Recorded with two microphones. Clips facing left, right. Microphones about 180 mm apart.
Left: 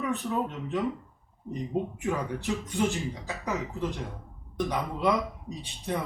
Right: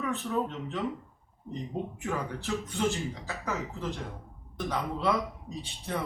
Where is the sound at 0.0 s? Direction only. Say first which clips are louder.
Left 1 dB; 15° left (ahead or behind).